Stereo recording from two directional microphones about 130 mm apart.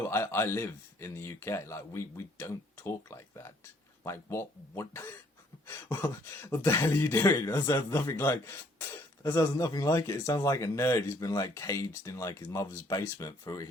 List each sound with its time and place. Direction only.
0.0 s speech: 20° left (ahead or behind)